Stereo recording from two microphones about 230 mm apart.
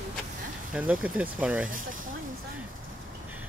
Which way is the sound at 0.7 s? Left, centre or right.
Centre.